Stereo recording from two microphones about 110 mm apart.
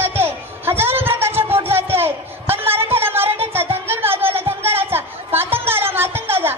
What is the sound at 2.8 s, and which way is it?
Music, 20° right (ahead or behind).